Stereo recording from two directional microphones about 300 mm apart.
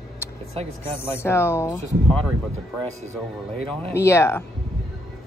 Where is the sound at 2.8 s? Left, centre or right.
Centre.